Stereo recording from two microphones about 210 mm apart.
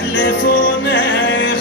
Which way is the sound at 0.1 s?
65° left (ahead or behind).